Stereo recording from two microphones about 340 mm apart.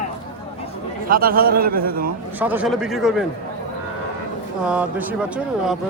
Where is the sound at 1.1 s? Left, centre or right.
Right.